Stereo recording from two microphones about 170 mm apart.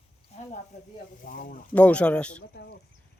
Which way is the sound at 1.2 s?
55° left (ahead or behind).